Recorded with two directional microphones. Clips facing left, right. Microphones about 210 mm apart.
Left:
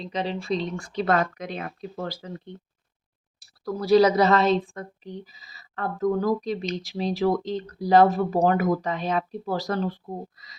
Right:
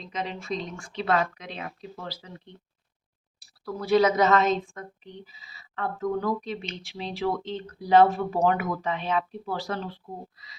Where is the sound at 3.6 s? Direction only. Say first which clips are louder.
Left 4 dB; 35° left (ahead or behind).